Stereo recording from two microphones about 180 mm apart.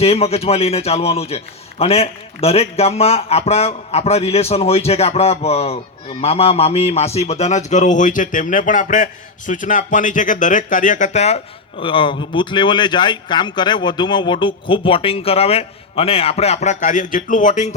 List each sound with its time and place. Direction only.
0.0 s speech: 35° left (ahead or behind)